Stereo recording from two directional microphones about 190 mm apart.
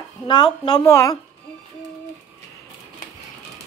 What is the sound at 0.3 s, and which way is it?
Speech, 25° left (ahead or behind).